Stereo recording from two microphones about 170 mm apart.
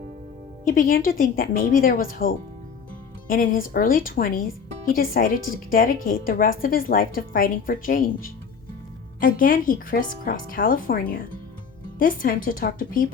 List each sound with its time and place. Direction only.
0.6 s a woman's voice: 55° left (ahead or behind)